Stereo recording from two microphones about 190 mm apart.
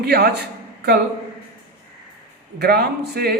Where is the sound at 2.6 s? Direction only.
60° right (ahead or behind).